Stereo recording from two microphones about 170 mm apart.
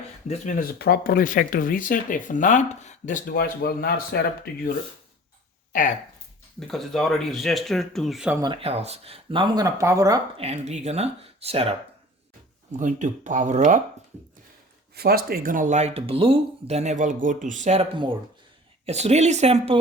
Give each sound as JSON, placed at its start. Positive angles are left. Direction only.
{"t": 0.3, "sound": "speech", "side_deg": 50}
{"t": 6.6, "sound": "speech", "side_deg": 5}
{"t": 8.6, "sound": "speech", "side_deg": -40}
{"t": 10.3, "sound": "speech", "side_deg": -35}
{"t": 12.7, "sound": "speech", "side_deg": -45}
{"t": 14.9, "sound": "speech", "side_deg": -65}
{"t": 18.9, "sound": "speech", "side_deg": -40}